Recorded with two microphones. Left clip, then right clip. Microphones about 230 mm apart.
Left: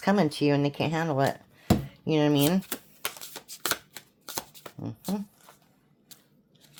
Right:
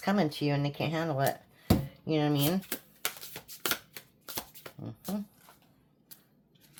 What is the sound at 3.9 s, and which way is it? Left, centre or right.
Shuffling cards, left.